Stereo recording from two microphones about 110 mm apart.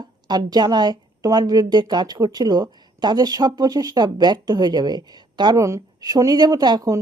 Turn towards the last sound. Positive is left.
turn(degrees=-35)  # may be behind; listen again after turning